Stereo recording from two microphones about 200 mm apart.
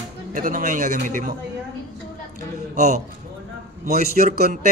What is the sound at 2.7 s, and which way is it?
A man's voice, 35° right (ahead or behind).